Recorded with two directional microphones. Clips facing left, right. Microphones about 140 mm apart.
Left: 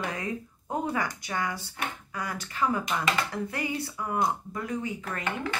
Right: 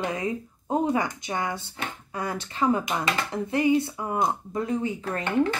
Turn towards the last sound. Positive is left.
turn(degrees=-30)  # may be behind; listen again after turning